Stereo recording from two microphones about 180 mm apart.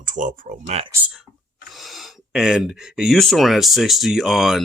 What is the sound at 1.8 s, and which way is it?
Speech, centre (ahead or behind).